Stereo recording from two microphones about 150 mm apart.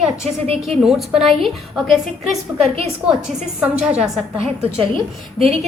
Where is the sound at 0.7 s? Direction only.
Centre (ahead or behind).